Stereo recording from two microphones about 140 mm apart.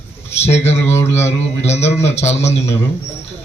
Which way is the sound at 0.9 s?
15° left (ahead or behind).